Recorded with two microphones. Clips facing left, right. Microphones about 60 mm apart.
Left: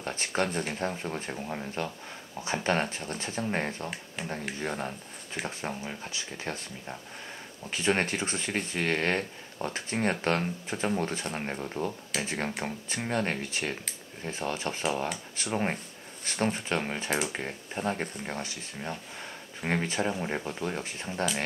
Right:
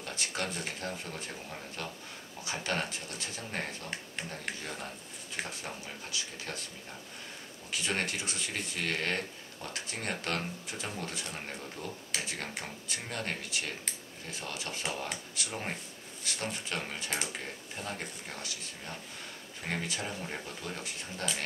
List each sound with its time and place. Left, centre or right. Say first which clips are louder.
0.0 s speech: left 6 dB; left
4.2 s speech: left 6 dB; centre
4.6 s speech: left 7 dB; left
7.7 s speech: left 6 dB; left